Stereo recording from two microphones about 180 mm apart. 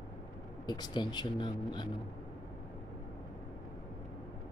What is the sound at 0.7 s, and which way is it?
Speech, 25° left (ahead or behind).